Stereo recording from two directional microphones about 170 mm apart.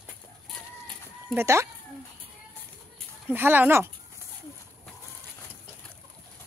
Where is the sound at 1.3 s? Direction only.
15° right (ahead or behind).